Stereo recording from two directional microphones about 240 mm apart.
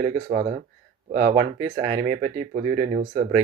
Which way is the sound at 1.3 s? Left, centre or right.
Centre.